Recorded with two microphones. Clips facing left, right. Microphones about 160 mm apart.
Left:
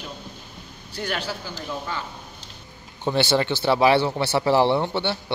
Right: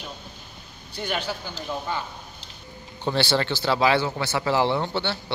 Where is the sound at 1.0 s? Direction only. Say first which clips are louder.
Even; centre (ahead or behind).